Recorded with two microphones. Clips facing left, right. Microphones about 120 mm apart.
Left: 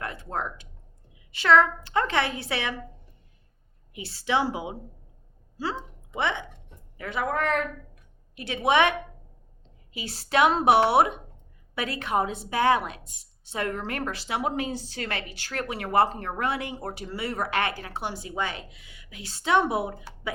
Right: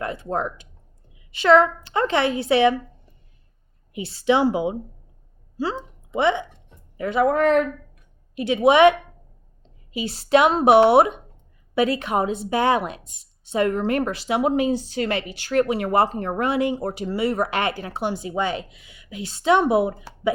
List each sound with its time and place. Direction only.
0.0 s a woman's voice: 25° right (ahead or behind)
3.9 s a woman's voice: 20° right (ahead or behind)
6.9 s a woman's voice: 20° right (ahead or behind)